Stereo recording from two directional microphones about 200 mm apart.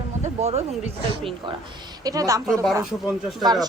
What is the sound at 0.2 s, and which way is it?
Speech, 30° right (ahead or behind).